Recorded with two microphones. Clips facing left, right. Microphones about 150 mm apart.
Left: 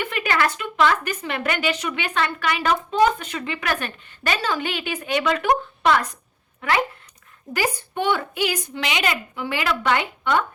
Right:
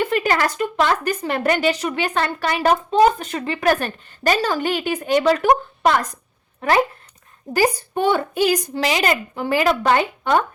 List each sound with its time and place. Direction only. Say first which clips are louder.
0.0 s a woman's voice: right 4 dB; 35° right (ahead or behind)